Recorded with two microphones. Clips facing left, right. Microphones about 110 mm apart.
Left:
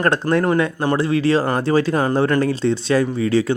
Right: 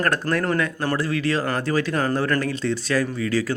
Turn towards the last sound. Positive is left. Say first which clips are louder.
# left 6 dB
turn(degrees=25)  # may be behind; listen again after turning